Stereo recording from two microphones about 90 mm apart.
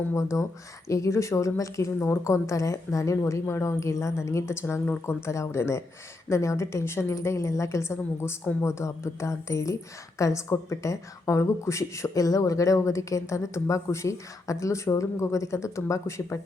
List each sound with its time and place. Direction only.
0.1 s a woman's voice: 35° left (ahead or behind)